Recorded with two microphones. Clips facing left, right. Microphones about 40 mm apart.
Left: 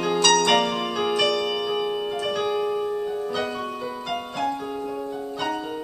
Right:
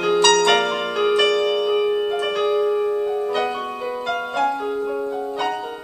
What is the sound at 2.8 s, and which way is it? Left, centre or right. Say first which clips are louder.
Music: right 5 dB; right.